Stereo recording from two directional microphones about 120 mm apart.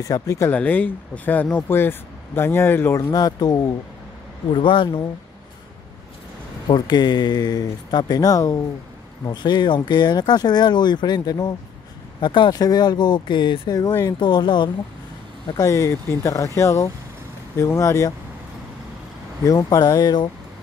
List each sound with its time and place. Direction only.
0.0 s speech: 30° left (ahead or behind)
0.5 s speech: 15° left (ahead or behind)
3.1 s speech: 35° left (ahead or behind)
4.6 s speech: 45° left (ahead or behind)
6.7 s speech: 35° left (ahead or behind)
15.6 s speech: 25° left (ahead or behind)
19.4 s speech: 30° left (ahead or behind)